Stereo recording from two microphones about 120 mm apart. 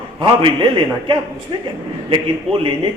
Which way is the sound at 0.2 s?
45° right (ahead or behind).